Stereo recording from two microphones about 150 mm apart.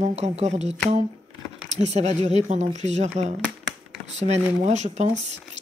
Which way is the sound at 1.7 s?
50° right (ahead or behind).